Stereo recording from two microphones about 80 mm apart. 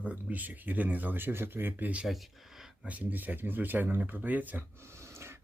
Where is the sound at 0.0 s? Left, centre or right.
Centre.